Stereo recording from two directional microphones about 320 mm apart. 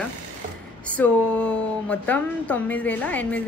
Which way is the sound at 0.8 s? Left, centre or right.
Centre.